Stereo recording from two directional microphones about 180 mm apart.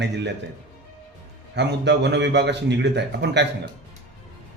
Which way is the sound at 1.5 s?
70° right (ahead or behind).